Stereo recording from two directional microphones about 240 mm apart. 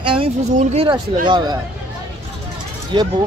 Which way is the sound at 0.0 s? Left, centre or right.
Right.